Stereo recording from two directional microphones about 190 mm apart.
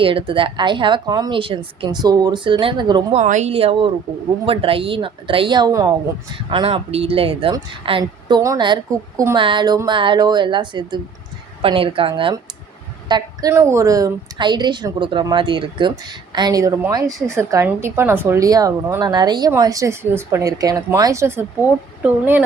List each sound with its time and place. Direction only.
0.0 s a woman's voice: 30° right (ahead or behind)
3.2 s a woman's voice: 35° right (ahead or behind); by 22.4 s 10° right (ahead or behind)